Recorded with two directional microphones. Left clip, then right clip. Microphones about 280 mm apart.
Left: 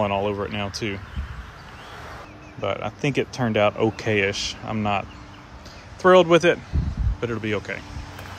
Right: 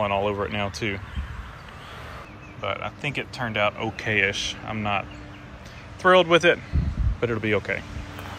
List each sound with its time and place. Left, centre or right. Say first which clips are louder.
0.0 s speech: left 1 dB; centre
2.6 s speech: left 3 dB; centre
6.0 s speech: left 2 dB; centre